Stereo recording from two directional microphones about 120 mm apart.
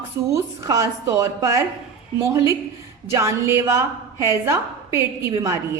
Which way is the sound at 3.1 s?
25° right (ahead or behind).